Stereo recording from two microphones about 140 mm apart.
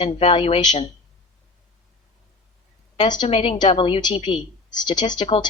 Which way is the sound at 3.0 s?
35° left (ahead or behind).